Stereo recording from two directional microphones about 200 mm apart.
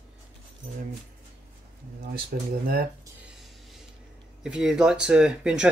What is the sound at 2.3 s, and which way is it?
Speech, 45° right (ahead or behind).